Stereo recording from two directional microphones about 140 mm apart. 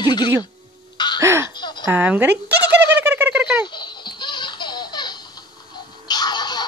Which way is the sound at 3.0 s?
10° right (ahead or behind).